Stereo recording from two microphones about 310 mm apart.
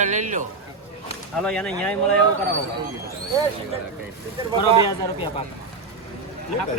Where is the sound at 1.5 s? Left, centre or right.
Centre.